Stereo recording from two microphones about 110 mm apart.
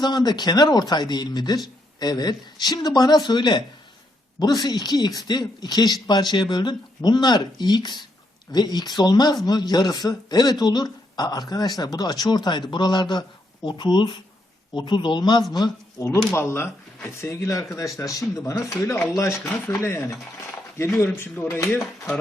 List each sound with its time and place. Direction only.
0.0 s a woman's voice: 40° left (ahead or behind)
16.0 s speech: 25° left (ahead or behind)